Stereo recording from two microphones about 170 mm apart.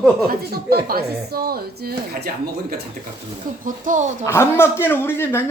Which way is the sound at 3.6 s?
50° right (ahead or behind).